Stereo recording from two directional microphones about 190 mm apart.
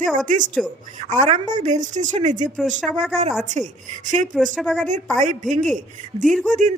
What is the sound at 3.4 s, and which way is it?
Speech, 40° right (ahead or behind).